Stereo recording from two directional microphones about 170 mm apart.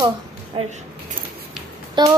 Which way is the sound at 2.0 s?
25° right (ahead or behind).